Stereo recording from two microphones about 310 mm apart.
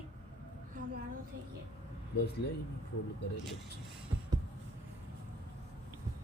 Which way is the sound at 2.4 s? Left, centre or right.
Left.